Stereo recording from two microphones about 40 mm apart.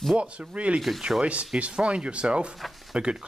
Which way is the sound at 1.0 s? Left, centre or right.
Centre.